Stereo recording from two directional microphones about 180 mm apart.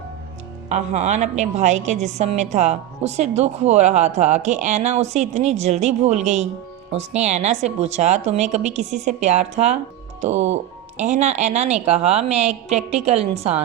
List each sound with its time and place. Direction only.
0.7 s a woman's voice: 40° right (ahead or behind)